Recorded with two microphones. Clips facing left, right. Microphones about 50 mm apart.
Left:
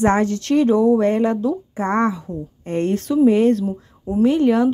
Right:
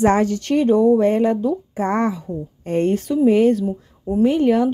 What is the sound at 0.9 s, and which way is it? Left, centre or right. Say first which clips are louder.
Speech: right 1 dB; left.